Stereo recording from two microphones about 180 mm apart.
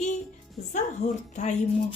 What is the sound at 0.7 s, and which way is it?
Speech, 40° left (ahead or behind).